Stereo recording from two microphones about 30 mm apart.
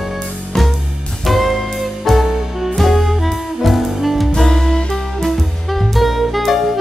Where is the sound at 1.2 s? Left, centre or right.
Centre.